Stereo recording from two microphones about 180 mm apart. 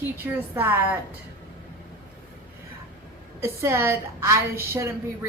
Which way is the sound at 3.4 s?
15° right (ahead or behind).